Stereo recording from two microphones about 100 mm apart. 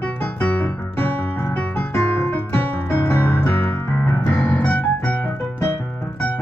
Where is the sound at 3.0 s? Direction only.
20° left (ahead or behind).